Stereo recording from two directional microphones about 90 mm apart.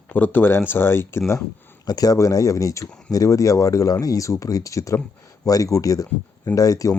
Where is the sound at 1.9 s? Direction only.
45° left (ahead or behind).